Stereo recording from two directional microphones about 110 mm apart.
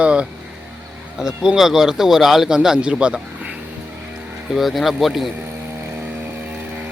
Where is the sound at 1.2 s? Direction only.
5° right (ahead or behind).